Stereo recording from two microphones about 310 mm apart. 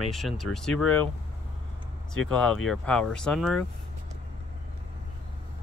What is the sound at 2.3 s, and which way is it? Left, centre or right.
Speech, centre.